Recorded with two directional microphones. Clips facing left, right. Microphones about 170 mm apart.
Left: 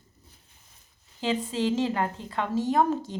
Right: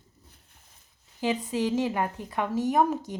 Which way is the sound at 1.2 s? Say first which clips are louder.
Even; 20° right (ahead or behind).